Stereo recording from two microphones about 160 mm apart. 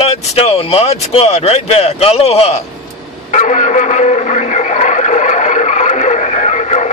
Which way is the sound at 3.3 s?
50° left (ahead or behind).